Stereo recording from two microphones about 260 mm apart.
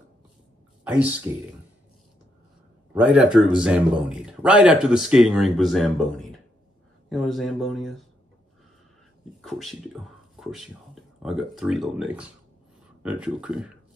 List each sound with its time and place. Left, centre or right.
0.8 s a man's voice: centre
2.9 s a man's voice: centre
9.4 s a man's voice: centre